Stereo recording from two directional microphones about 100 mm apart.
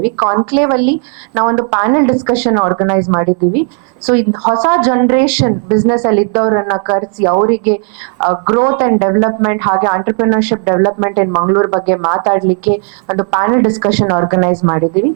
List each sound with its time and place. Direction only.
0.0 s speech: 15° right (ahead or behind)